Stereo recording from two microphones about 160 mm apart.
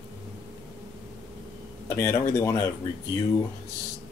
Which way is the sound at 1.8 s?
15° left (ahead or behind).